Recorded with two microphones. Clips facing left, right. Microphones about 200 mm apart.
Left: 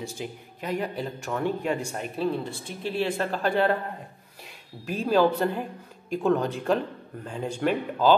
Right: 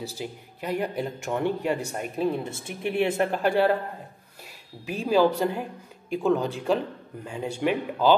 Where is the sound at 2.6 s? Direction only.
60° right (ahead or behind).